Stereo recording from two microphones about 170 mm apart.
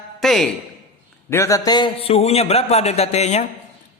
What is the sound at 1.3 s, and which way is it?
A man's voice, 20° left (ahead or behind).